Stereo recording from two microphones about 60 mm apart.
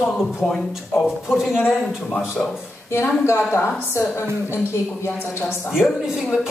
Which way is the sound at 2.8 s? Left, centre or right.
Left.